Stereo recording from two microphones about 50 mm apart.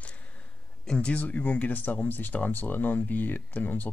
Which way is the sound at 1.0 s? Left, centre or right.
Left.